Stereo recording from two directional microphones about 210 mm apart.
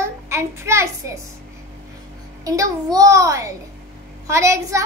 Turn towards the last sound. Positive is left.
turn(degrees=-15)  # may be behind; listen again after turning